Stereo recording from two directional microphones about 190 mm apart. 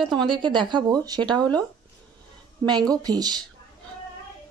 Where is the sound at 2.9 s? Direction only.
20° right (ahead or behind).